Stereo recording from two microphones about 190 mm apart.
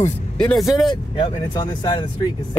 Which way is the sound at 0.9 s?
20° left (ahead or behind).